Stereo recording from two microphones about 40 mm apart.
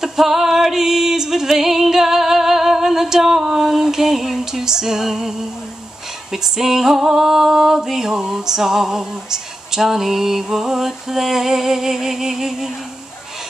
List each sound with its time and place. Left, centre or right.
0.0 s music: centre